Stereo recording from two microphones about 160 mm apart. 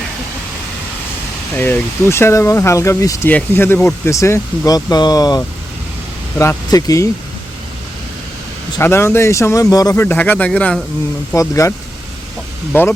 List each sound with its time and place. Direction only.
1.5 s speech: 10° left (ahead or behind)
8.8 s speech: 15° left (ahead or behind)
11.3 s speech: 20° left (ahead or behind)